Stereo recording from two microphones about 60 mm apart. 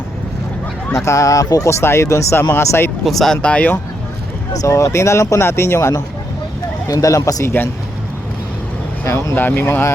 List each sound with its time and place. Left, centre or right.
0.9 s speech: left
1.7 s speech: left
2.5 s speech: left
3.0 s speech: centre
3.3 s speech: left
4.7 s speech: left
6.8 s speech: left
9.0 s speech: left
9.3 s speech: left